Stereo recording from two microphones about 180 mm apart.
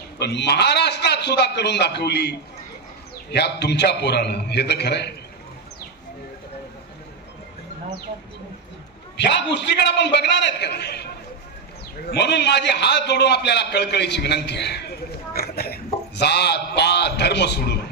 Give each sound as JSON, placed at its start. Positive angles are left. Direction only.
{"t": 0.2, "sound": "a man's voice", "side_deg": 70}
{"t": 9.1, "sound": "a man's voice", "side_deg": 75}
{"t": 12.1, "sound": "a man's voice", "side_deg": 70}